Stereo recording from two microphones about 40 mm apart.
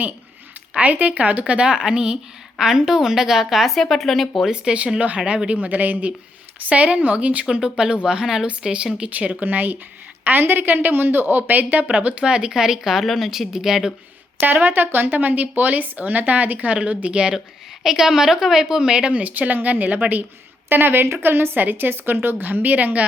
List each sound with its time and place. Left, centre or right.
0.8 s a woman's voice: right; by 4.3 s centre
4.4 s speech: right
4.9 s speech: right
5.5 s speech: right
7.6 s a woman's voice: right
9.0 s speech: right
11.9 s speech: right
12.5 s a woman's voice: centre
14.4 s speech: right
17.8 s a woman's voice: centre
19.1 s speech: right
20.7 s speech: right